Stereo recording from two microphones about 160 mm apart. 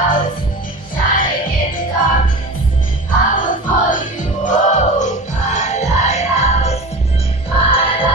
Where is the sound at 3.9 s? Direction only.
50° left (ahead or behind).